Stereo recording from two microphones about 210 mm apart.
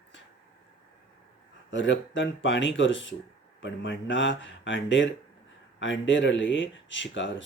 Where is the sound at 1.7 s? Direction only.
60° left (ahead or behind).